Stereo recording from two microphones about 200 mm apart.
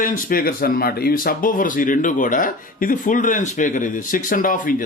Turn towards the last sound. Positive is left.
turn(degrees=40)  # may be behind; listen again after turning